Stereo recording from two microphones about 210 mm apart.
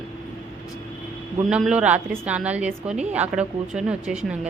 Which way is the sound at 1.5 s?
5° right (ahead or behind).